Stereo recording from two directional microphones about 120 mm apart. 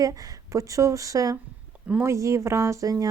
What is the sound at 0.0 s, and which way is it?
A woman's voice, 30° right (ahead or behind).